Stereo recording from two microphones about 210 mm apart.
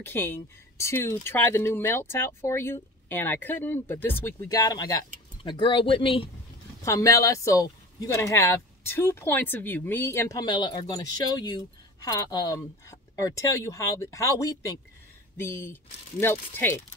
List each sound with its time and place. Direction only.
0.1 s speech: 10° left (ahead or behind)
6.8 s speech: 15° left (ahead or behind)